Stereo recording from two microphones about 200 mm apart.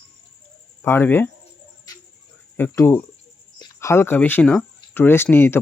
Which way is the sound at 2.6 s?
10° left (ahead or behind).